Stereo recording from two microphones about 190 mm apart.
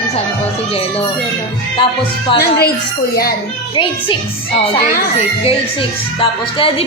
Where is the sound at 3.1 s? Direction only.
50° left (ahead or behind).